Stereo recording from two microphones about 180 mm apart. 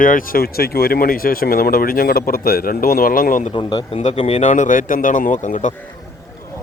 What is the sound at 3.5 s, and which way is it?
Speech, 30° left (ahead or behind).